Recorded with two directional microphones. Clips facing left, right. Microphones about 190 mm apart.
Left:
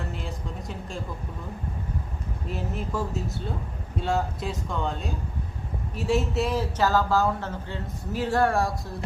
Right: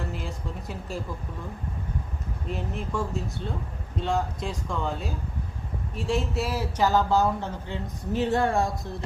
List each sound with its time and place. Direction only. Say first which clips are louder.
0.1 s speech: even; centre (ahead or behind)
2.5 s speech: even; 5° left (ahead or behind); by 8.9 s 20° right (ahead or behind)